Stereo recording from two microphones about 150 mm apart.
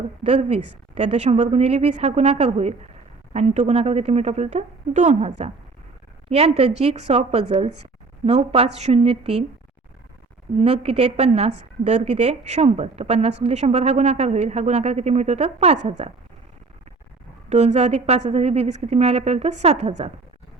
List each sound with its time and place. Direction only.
0.2 s a woman's voice: 40° right (ahead or behind)
10.6 s a woman's voice: 45° right (ahead or behind)
17.5 s a woman's voice: 50° right (ahead or behind)